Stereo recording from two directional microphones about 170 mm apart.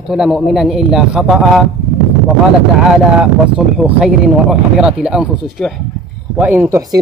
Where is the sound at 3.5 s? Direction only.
5° right (ahead or behind).